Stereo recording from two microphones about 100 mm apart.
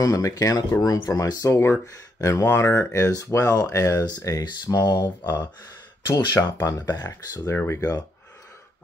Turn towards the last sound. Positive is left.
turn(degrees=20)  # may be behind; listen again after turning